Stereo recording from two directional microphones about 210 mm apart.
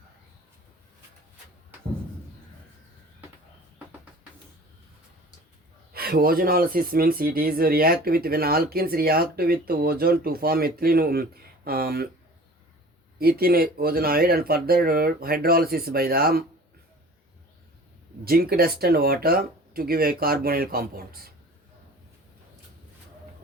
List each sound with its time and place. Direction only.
5.9 s speech: 45° right (ahead or behind)
13.1 s speech: 45° right (ahead or behind)
18.3 s speech: 45° right (ahead or behind)